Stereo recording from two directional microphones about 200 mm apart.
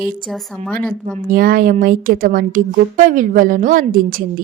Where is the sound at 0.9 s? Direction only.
45° right (ahead or behind).